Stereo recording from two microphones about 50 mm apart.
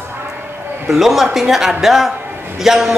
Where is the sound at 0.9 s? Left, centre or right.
Centre.